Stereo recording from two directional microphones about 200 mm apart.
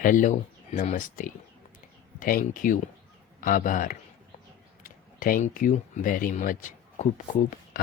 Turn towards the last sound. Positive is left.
turn(degrees=40)  # may be behind; listen again after turning